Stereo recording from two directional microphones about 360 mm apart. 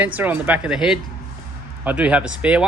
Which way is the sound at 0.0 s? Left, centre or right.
Centre.